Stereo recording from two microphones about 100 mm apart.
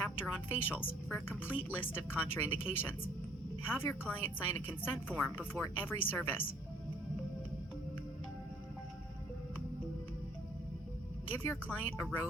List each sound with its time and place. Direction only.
0.4 s a woman's voice: 20° left (ahead or behind)
11.3 s a woman's voice: 20° left (ahead or behind)